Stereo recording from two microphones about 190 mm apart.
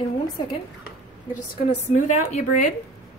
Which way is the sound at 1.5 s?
40° left (ahead or behind).